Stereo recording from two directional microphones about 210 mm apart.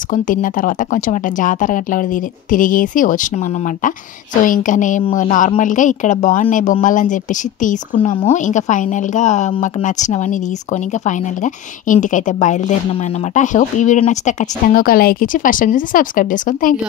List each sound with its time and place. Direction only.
0.1 s speech: 40° left (ahead or behind)